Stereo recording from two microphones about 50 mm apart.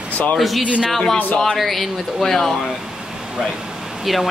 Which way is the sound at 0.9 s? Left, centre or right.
Centre.